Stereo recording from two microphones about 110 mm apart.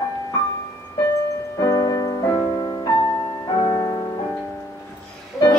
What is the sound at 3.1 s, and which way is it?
Music, 40° left (ahead or behind).